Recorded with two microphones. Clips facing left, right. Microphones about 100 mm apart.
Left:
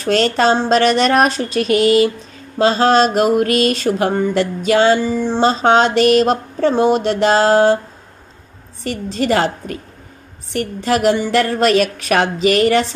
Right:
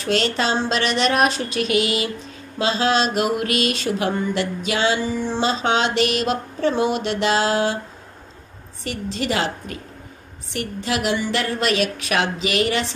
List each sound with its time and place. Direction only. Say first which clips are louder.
0.0 s mantra: left 7 dB; 45° left (ahead or behind)
8.8 s mantra: left 6 dB; 45° left (ahead or behind)